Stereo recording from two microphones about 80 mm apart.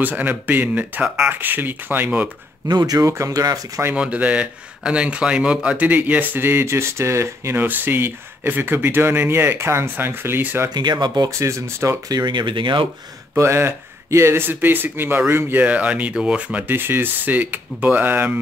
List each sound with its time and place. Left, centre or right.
0.0 s speech: right
2.7 s speech: right
3.9 s speech: centre; by 7.6 s right
7.6 s speech: right
10.7 s speech: right
11.2 s speech: right
12.1 s speech: right
13.4 s speech: right